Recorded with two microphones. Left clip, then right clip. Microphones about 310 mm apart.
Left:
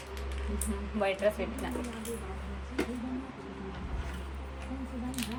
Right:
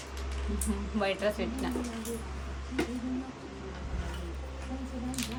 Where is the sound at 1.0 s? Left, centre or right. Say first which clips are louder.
Left 1 dB; centre.